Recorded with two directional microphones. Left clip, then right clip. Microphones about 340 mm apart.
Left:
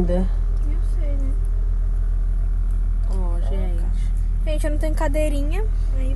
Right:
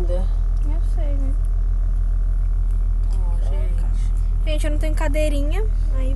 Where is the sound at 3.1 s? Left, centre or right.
Centre.